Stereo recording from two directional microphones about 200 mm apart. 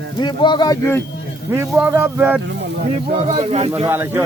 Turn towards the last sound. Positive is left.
turn(degrees=-10)  # may be behind; listen again after turning